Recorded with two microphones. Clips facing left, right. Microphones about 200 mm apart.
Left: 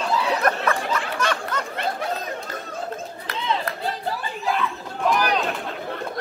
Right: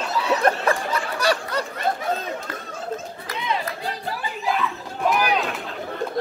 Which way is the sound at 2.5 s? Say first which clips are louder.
Left 1 dB; 60° right (ahead or behind).